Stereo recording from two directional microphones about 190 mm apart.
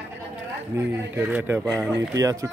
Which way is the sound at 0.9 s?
10° right (ahead or behind).